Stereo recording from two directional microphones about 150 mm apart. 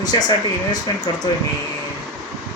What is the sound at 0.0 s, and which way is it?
Speech, 25° left (ahead or behind).